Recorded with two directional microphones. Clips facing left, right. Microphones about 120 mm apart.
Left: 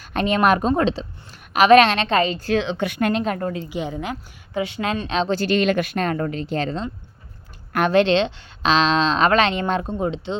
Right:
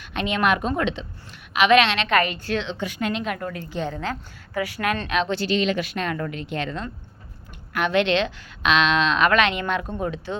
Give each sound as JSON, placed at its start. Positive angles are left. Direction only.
{"t": 0.0, "sound": "a woman's voice", "side_deg": 40}
{"t": 2.0, "sound": "a woman's voice", "side_deg": 30}
{"t": 2.4, "sound": "a woman's voice", "side_deg": 45}
{"t": 3.1, "sound": "a woman's voice", "side_deg": 40}
{"t": 3.5, "sound": "a woman's voice", "side_deg": 15}
{"t": 5.4, "sound": "a woman's voice", "side_deg": 55}